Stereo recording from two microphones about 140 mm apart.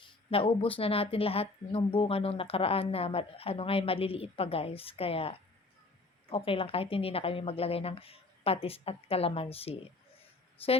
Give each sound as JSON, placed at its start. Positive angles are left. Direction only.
{"t": 0.0, "sound": "a woman's voice", "side_deg": 40}